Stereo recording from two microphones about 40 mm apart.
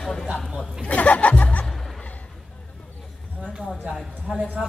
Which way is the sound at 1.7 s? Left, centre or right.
Centre.